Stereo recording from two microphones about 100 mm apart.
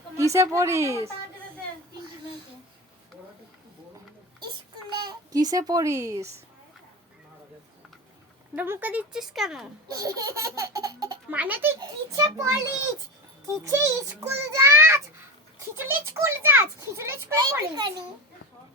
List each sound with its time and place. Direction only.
0.2 s a child's voice: 30° right (ahead or behind)
4.9 s a child's voice: 45° right (ahead or behind)
8.5 s speech: 20° right (ahead or behind)
9.1 s speech: 5° right (ahead or behind)
9.9 s laughter: 35° right (ahead or behind)
11.3 s a child's voice: 15° right (ahead or behind)
11.8 s a child's voice: 35° right (ahead or behind)
13.7 s a child's voice: 25° right (ahead or behind)
17.3 s a child's voice: 40° right (ahead or behind)